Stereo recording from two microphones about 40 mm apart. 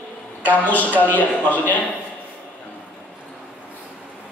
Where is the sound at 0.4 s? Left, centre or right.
Left.